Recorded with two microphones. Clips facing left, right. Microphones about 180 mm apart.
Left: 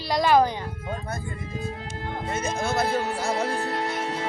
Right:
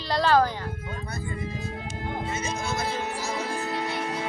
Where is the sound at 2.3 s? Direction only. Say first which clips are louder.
Left 7 dB; 55° left (ahead or behind).